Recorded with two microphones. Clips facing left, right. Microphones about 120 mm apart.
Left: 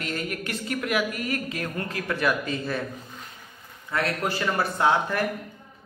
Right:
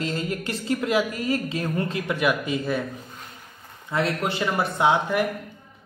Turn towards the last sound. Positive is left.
turn(degrees=-15)  # may be behind; listen again after turning